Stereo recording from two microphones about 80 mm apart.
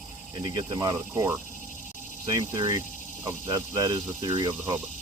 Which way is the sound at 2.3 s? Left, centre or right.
Right.